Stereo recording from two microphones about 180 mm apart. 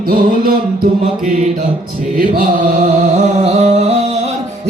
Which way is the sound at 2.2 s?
50° right (ahead or behind).